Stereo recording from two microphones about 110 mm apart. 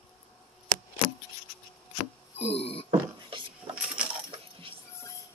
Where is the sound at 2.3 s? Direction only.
70° left (ahead or behind).